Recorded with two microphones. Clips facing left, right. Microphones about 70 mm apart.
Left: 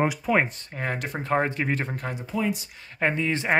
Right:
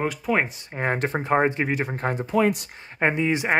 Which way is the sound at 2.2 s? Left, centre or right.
Right.